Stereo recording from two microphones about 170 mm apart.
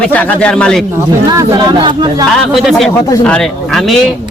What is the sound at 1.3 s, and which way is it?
Speech, 20° right (ahead or behind).